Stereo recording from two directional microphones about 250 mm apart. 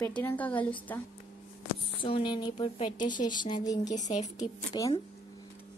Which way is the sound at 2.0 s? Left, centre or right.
Left.